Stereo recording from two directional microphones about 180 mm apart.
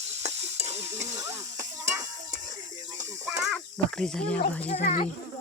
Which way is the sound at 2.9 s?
40° right (ahead or behind).